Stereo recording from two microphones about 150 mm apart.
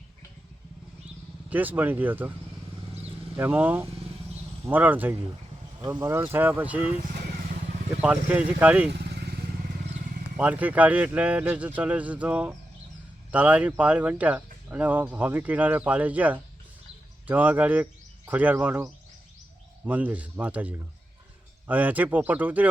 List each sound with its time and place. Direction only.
1.5 s speech: 10° right (ahead or behind)
3.3 s speech: 15° right (ahead or behind)
7.1 s vehicle: 75° right (ahead or behind)
8.0 s speech: 5° right (ahead or behind)
9.0 s motorcycle: 90° right
10.3 s speech: 10° right (ahead or behind)